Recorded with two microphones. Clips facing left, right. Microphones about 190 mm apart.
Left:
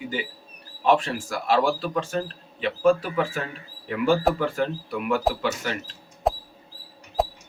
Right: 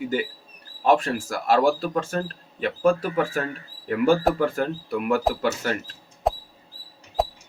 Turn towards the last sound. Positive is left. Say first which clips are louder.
# even
turn(degrees=0)  # may be behind; listen again after turning